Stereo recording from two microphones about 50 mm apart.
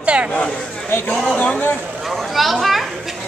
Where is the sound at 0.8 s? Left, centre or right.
Left.